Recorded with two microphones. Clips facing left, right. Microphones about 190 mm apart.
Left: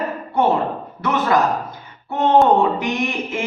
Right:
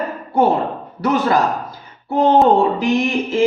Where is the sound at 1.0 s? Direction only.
35° right (ahead or behind).